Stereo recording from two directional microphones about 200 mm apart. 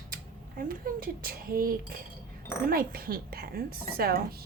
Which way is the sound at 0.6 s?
45° right (ahead or behind).